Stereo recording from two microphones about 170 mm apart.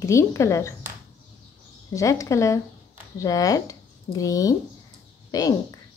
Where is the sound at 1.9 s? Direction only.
20° left (ahead or behind).